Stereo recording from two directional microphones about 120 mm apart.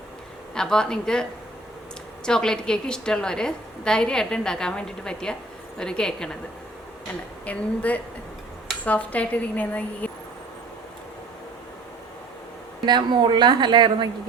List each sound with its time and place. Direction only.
0.5 s a woman's voice: 5° left (ahead or behind)
7.4 s speech: 10° left (ahead or behind)
12.8 s speech: 40° right (ahead or behind)